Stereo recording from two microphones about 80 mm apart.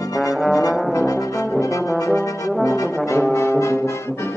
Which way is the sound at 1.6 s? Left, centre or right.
Left.